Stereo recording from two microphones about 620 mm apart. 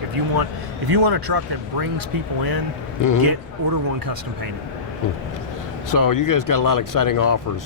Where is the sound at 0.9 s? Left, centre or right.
Right.